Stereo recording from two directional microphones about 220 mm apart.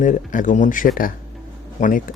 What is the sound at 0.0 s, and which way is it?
Speech, 35° left (ahead or behind).